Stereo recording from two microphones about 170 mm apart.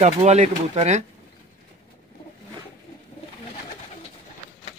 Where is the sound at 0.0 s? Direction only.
40° right (ahead or behind).